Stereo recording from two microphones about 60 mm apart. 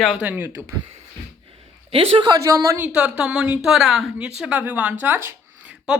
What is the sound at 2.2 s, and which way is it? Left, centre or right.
Speech, right.